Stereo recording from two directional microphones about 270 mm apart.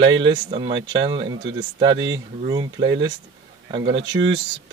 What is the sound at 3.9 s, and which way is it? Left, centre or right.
Speech, right.